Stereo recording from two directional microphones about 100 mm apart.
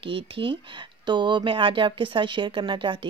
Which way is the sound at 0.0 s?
60° right (ahead or behind).